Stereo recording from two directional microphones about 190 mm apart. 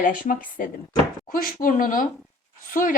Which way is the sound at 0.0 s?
45° left (ahead or behind).